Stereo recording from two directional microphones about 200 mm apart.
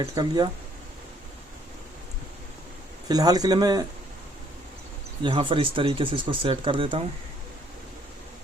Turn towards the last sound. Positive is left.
turn(degrees=-25)  # may be behind; listen again after turning